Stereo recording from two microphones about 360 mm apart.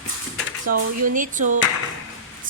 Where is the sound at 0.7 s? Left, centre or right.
Right.